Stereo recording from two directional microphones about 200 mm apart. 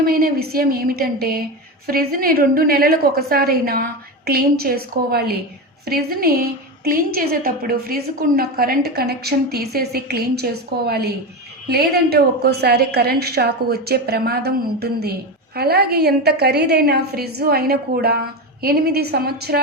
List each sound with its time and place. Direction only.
0.0 s a woman's voice: 50° right (ahead or behind)